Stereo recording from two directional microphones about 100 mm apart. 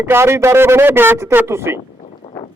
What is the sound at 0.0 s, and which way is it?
A man's voice, 25° right (ahead or behind).